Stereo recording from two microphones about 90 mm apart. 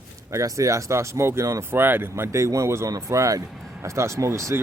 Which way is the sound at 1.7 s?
25° right (ahead or behind).